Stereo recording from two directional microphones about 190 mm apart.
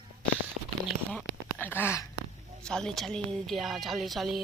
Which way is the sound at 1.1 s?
10° left (ahead or behind).